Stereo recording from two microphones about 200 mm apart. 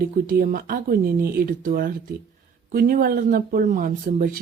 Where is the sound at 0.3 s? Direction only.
45° right (ahead or behind).